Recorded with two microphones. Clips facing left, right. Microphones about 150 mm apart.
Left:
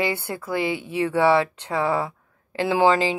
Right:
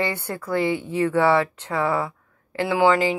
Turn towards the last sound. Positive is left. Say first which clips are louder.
# even
turn(degrees=25)  # may be behind; listen again after turning